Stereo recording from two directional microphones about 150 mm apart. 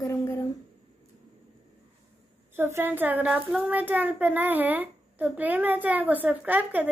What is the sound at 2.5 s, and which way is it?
Speech, 15° right (ahead or behind).